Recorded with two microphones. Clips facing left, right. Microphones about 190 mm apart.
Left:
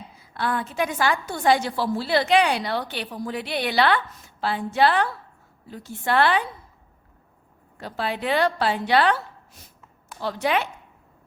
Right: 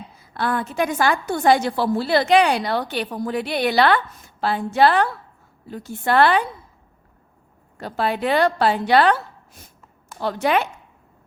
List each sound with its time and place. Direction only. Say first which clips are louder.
0.3 s a woman's voice: right 3 dB; 45° right (ahead or behind)
7.8 s a woman's voice: right 5 dB; 50° right (ahead or behind)
10.2 s a woman's voice: right 4 dB; 50° right (ahead or behind)